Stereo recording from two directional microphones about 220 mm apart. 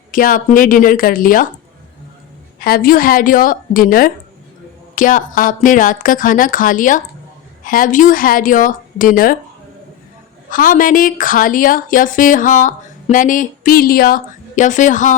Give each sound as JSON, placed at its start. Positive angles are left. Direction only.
{"t": 0.1, "sound": "a woman's voice", "side_deg": 40}
{"t": 2.6, "sound": "a woman's voice", "side_deg": 45}
{"t": 10.5, "sound": "a woman's voice", "side_deg": 40}